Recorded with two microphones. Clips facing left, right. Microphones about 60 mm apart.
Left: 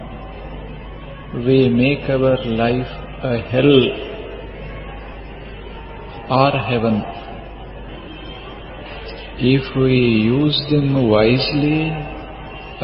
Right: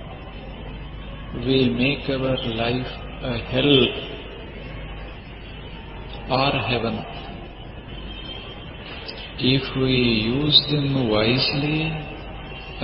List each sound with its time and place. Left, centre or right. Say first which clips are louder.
1.3 s speech: left 6 dB; centre
1.7 s speech: left 7 dB; left
2.7 s a sound: left 5 dB; centre
3.2 s speech: left 6 dB; left
3.8 s a man's voice: left 5 dB; left
6.4 s a man's voice: left 8 dB; left
9.4 s speech: left 6 dB; left
9.7 s speech: left 6 dB; centre
10.0 s speech: left 6 dB; left
10.2 s speech: left 6 dB; centre
10.8 s speech: left 6 dB; left
11.3 s speech: left 6 dB; centre
11.6 s speech: left 7 dB; left